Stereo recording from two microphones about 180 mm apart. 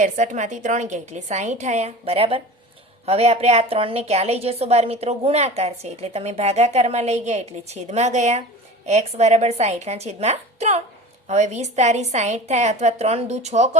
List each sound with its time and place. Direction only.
0.0 s a woman's voice: 45° right (ahead or behind)